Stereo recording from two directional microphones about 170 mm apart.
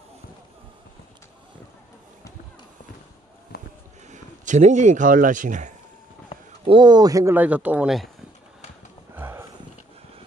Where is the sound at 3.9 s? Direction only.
45° right (ahead or behind).